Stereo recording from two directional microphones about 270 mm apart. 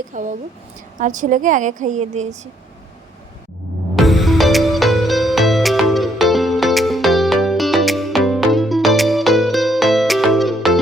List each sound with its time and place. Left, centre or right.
0.1 s a woman's voice: right
3.9 s music: centre